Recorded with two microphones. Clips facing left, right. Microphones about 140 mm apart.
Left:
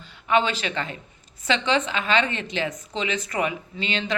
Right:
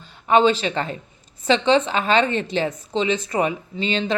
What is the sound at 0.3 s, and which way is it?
A woman's voice, 35° right (ahead or behind).